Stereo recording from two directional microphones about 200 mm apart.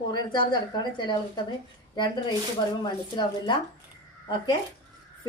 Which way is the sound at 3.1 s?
20° left (ahead or behind).